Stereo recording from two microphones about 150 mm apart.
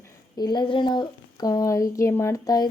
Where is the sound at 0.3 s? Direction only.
30° left (ahead or behind).